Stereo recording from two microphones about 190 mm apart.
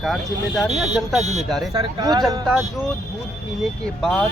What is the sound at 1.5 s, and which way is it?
Speech, centre (ahead or behind).